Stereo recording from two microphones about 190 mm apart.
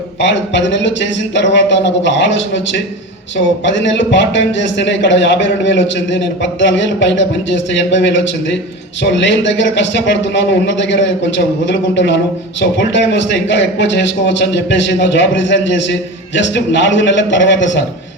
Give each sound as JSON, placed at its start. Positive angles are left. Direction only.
{"t": 0.2, "sound": "a man's voice", "side_deg": 70}